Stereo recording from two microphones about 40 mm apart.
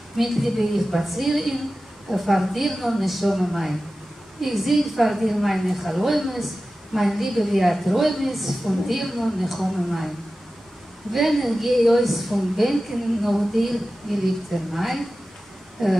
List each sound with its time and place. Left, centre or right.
0.2 s a woman's voice: centre
11.1 s a woman's voice: centre